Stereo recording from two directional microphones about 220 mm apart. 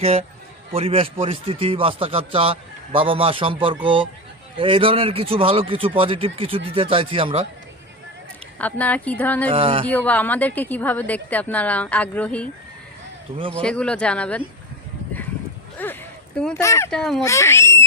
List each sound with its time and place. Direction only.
0.0 s speech: 30° right (ahead or behind)
8.5 s a woman's voice: 5° left (ahead or behind)
9.5 s speech: 25° right (ahead or behind)
9.8 s a woman's voice: 5° left (ahead or behind)
13.6 s speech: 5° left (ahead or behind)
15.8 s a woman's voice: 10° left (ahead or behind)
16.6 s a woman's voice: 15° left (ahead or behind)
16.9 s speech: 5° left (ahead or behind)